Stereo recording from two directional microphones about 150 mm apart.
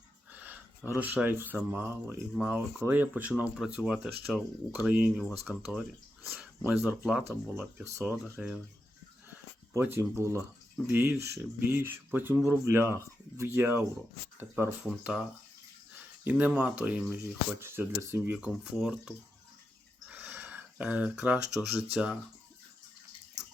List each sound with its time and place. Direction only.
0.3 s a sound: 10° right (ahead or behind)
0.9 s speech: 10° right (ahead or behind)
7.3 s speech: 15° right (ahead or behind)
9.7 s speech: 15° right (ahead or behind)
16.2 s speech: 10° right (ahead or behind)
18.3 s speech: 5° right (ahead or behind)